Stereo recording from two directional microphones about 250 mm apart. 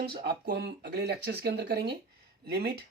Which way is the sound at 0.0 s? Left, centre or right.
Right.